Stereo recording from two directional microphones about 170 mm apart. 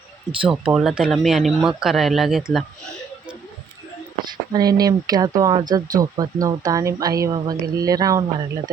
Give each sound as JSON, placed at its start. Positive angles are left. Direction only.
{"t": 0.3, "sound": "speech", "side_deg": -5}
{"t": 4.3, "sound": "speech", "side_deg": -25}